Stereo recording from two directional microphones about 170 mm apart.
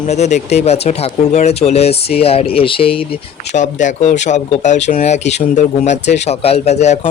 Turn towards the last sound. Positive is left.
turn(degrees=40)  # may be behind; listen again after turning